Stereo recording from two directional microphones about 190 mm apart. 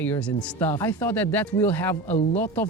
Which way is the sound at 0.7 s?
20° left (ahead or behind).